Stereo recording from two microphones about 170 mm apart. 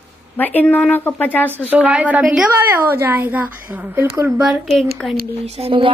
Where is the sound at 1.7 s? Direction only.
10° right (ahead or behind).